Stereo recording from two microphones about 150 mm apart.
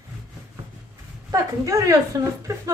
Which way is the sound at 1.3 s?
20° right (ahead or behind).